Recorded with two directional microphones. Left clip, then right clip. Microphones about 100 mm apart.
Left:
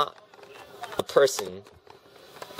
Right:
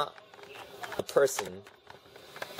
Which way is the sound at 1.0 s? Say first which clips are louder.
Left 5 dB; 25° left (ahead or behind).